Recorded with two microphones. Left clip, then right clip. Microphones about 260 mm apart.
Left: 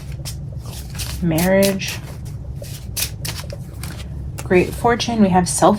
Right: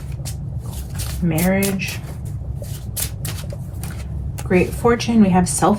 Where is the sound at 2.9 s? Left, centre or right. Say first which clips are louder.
Left 5 dB; centre.